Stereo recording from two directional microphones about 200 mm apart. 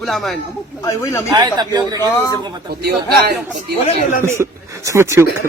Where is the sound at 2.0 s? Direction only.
15° left (ahead or behind).